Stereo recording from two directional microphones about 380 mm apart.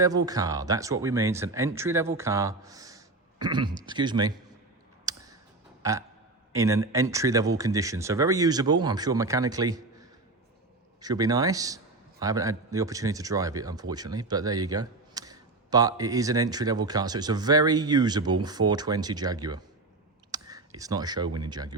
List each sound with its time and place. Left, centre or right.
0.0 s speech: centre
5.1 s clicking: centre
6.5 s speech: centre
11.0 s speech: centre